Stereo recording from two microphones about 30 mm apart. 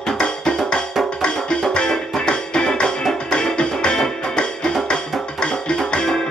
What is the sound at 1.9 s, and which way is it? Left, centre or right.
Music, left.